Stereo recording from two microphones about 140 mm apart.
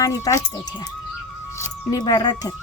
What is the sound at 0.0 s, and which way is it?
Speech, 25° left (ahead or behind).